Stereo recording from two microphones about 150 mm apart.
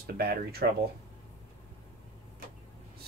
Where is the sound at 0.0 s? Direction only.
90° right.